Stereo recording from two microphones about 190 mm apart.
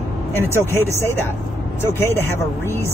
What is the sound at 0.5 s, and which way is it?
Speech, 15° left (ahead or behind).